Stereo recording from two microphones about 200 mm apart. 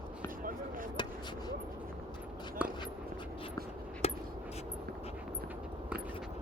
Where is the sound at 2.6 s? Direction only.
5° right (ahead or behind).